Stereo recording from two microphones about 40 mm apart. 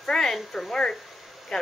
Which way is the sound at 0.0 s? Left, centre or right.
Centre.